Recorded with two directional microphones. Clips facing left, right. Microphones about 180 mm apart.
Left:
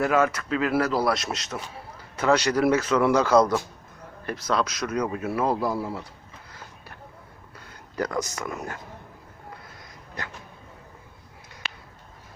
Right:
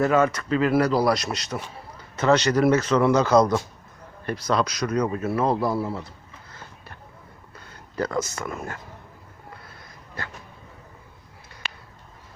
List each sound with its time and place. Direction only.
0.0 s speech: 5° left (ahead or behind)
7.9 s speech: 15° left (ahead or behind)
11.6 s a sound: 5° right (ahead or behind)